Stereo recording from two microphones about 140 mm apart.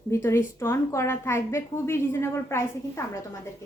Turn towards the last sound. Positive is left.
turn(degrees=20)  # may be behind; listen again after turning